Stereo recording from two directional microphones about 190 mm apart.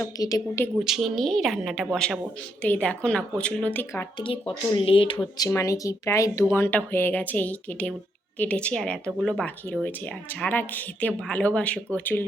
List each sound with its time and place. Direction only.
0.0 s speech: 20° left (ahead or behind)
0.9 s a woman's voice: centre (ahead or behind)
4.2 s a woman's voice: 25° left (ahead or behind); by 12.2 s 10° left (ahead or behind)